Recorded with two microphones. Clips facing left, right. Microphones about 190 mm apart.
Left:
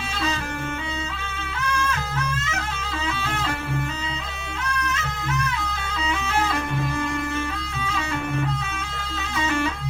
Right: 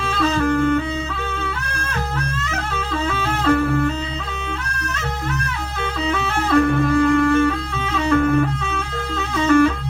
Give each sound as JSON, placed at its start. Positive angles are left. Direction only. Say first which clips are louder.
{"t": 0.3, "sound": "music", "louder": "right 13 dB", "side_deg": -55}
{"t": 3.1, "sound": "music", "louder": "right 10 dB", "side_deg": -50}
{"t": 6.1, "sound": "music", "louder": "right 4 dB", "side_deg": -55}
{"t": 9.5, "sound": "music", "louder": "right 12 dB", "side_deg": -50}